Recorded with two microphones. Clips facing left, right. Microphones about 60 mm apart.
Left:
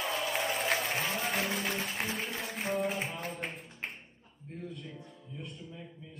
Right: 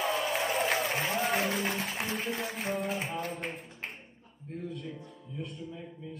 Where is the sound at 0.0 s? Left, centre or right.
Centre.